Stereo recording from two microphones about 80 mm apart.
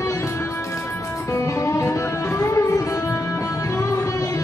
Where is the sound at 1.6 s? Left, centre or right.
Left.